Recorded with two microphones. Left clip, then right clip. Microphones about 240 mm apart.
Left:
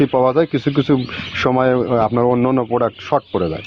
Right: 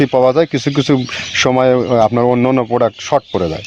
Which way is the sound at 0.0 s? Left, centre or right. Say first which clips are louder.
Right 3 dB; right.